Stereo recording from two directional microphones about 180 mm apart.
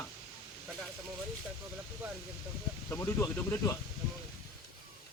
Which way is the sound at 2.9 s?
15° left (ahead or behind).